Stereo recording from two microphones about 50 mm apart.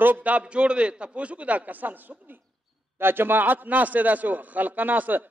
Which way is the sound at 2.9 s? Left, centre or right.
Right.